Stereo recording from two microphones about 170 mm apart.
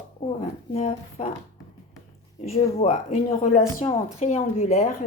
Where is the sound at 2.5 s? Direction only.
40° left (ahead or behind).